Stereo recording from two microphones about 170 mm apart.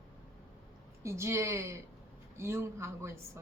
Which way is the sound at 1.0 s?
15° right (ahead or behind).